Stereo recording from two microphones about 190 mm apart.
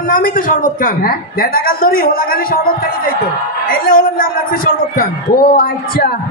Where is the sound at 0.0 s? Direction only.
45° left (ahead or behind).